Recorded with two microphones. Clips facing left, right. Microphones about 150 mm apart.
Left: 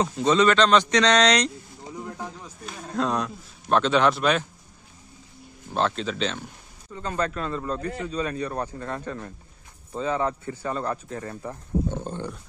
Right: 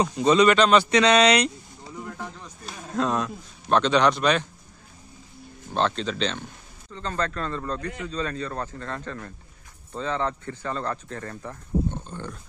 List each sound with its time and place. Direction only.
0.0 s speech: 10° right (ahead or behind)
1.9 s a sound: 15° left (ahead or behind)
2.9 s speech: centre (ahead or behind)
5.7 s speech: 5° left (ahead or behind)